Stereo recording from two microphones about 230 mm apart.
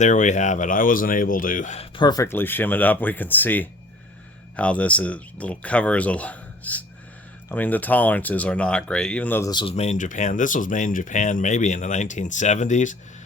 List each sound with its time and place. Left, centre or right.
0.0 s speech: left